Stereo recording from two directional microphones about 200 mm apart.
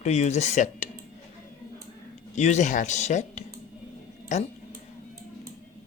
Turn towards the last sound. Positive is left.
turn(degrees=35)  # may be behind; listen again after turning